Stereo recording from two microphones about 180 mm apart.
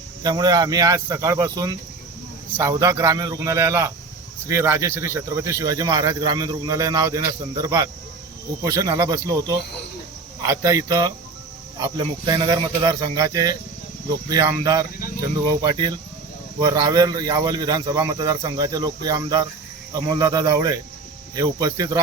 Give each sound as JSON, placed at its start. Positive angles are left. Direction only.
{"t": 0.2, "sound": "a man's voice", "side_deg": -25}
{"t": 10.4, "sound": "a man's voice", "side_deg": -15}